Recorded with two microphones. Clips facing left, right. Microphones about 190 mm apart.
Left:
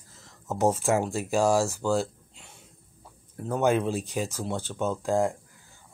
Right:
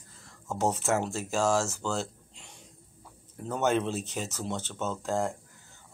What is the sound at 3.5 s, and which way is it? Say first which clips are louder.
Speech: left 3 dB; 10° left (ahead or behind).